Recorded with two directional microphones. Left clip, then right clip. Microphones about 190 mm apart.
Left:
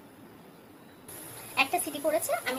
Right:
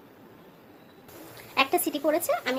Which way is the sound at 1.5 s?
55° right (ahead or behind).